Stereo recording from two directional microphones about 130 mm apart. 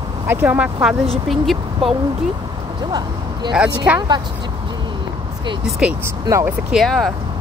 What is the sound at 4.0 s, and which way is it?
Speech, 35° right (ahead or behind).